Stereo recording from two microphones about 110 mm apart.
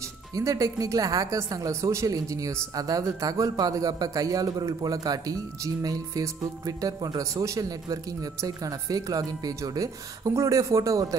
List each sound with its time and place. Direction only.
0.4 s speech: 30° right (ahead or behind)